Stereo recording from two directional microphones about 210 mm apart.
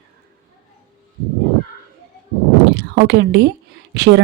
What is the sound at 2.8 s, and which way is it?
Speech, 55° right (ahead or behind).